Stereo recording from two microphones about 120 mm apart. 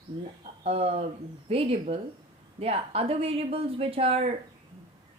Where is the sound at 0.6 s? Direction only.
55° right (ahead or behind).